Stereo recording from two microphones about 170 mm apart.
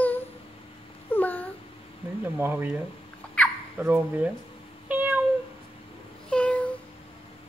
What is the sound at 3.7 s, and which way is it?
Speech, 10° right (ahead or behind).